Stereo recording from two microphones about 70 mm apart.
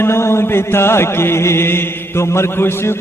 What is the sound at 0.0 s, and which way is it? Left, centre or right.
Mantra, left.